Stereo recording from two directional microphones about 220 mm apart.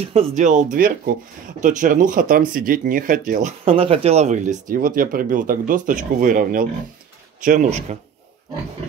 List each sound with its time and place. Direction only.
0.0 s speech: 30° right (ahead or behind)